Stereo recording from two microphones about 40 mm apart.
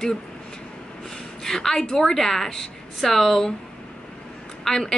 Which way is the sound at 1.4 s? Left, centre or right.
Centre.